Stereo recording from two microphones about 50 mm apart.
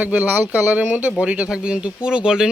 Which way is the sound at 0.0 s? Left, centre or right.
Right.